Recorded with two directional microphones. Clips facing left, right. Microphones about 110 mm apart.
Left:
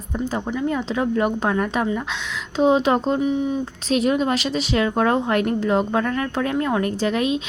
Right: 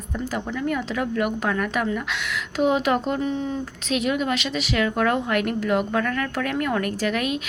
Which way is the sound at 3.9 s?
35° left (ahead or behind).